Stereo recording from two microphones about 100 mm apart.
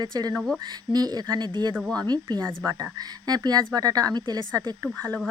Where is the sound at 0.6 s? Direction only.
45° right (ahead or behind).